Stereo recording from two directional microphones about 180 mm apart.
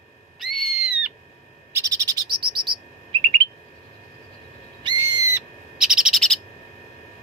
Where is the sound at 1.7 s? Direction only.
20° right (ahead or behind).